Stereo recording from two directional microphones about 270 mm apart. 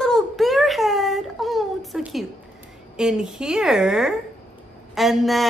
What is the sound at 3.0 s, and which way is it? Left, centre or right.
A woman's voice, centre.